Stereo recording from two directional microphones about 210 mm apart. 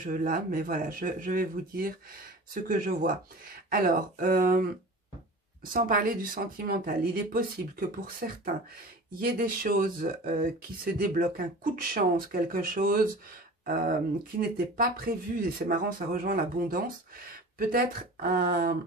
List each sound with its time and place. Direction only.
0.0 s speech: 40° right (ahead or behind)
5.7 s speech: 40° right (ahead or behind)